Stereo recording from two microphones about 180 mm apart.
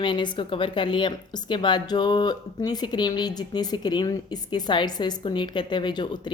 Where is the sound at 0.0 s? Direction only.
25° left (ahead or behind).